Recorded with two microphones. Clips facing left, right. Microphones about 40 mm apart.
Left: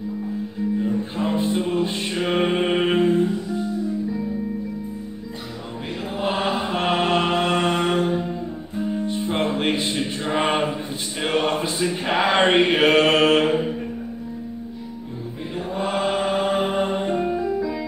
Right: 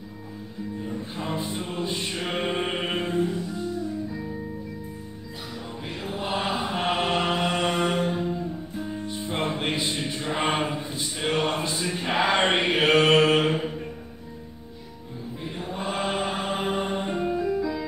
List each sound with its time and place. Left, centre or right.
0.7 s music: centre
2.7 s mantra: left
3.0 s music: centre
6.1 s chant: centre
6.6 s mantra: centre
7.7 s music: left
10.0 s mantra: centre
10.3 s chant: left
11.1 s a sound: centre
12.4 s mantra: centre
13.5 s a sound: centre
15.5 s mantra: centre
16.8 s music: centre
17.4 s music: centre